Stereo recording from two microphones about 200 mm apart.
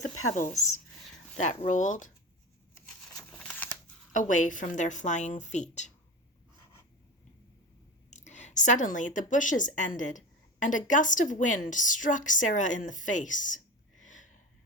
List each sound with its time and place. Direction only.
1.4 s a woman's voice: 35° left (ahead or behind)
3.1 s a sound: 5° left (ahead or behind)
4.1 s a woman's voice: 40° left (ahead or behind)
8.1 s a woman's voice: 35° left (ahead or behind)